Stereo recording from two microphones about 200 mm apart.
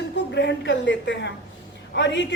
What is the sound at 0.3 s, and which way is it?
A woman's voice, 60° left (ahead or behind).